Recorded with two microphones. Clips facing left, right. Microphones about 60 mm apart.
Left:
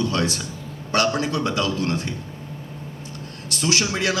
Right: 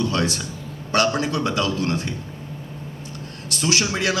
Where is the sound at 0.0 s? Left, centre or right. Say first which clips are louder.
Even; right.